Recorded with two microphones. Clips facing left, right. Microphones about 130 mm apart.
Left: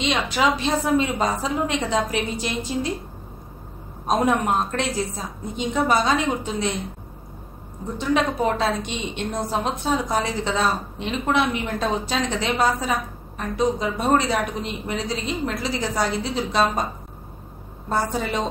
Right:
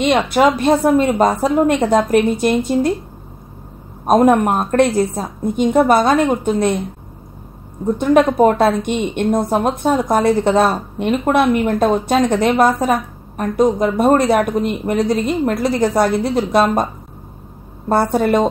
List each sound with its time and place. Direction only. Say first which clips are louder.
0.0 s a woman's voice: right 8 dB; 55° right (ahead or behind)
4.0 s a woman's voice: right 9 dB; 55° right (ahead or behind)
8.0 s a woman's voice: right 9 dB; 50° right (ahead or behind)
17.8 s a woman's voice: right 9 dB; 60° right (ahead or behind)